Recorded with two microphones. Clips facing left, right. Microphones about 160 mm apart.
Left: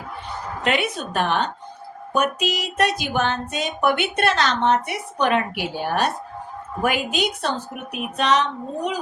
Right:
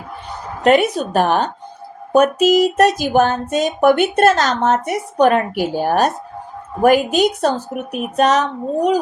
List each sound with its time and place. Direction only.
0.6 s a woman's voice: 40° right (ahead or behind)